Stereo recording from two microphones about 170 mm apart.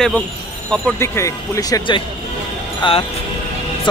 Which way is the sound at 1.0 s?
15° left (ahead or behind).